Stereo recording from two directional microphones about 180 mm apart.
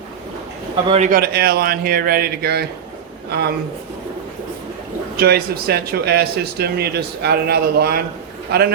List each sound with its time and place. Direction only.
0.9 s speech: 35° right (ahead or behind)
1.1 s a man's voice: 60° right (ahead or behind)
5.1 s speech: 60° right (ahead or behind)